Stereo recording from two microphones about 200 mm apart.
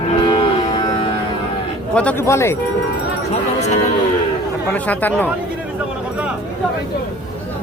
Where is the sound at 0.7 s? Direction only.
20° left (ahead or behind).